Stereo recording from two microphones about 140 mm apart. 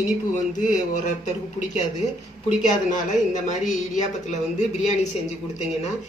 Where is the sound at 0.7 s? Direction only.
60° left (ahead or behind).